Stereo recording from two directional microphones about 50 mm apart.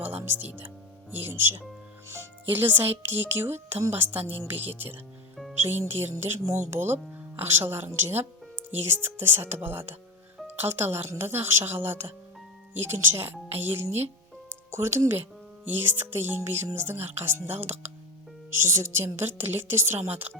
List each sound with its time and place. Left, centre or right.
0.0 s music: right
1.1 s speech: right
6.4 s speech: right
6.7 s speech: right
18.6 s speech: right